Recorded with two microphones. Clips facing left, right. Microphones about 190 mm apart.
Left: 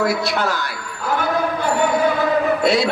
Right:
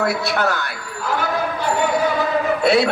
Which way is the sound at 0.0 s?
60° right (ahead or behind).